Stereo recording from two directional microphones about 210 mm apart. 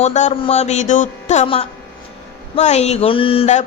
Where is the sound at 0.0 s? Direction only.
35° left (ahead or behind).